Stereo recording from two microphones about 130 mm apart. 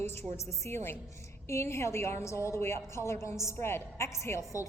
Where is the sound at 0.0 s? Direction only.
20° left (ahead or behind).